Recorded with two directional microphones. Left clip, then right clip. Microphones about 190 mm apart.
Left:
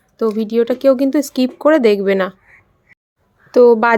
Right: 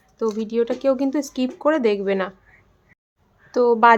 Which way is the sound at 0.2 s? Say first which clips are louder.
Left 6 dB; 25° left (ahead or behind).